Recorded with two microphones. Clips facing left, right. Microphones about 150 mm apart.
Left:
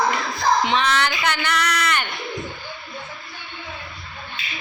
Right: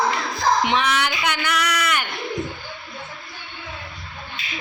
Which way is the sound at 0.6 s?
15° right (ahead or behind).